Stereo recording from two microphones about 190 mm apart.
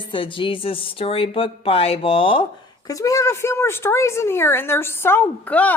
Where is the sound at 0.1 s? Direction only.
25° left (ahead or behind).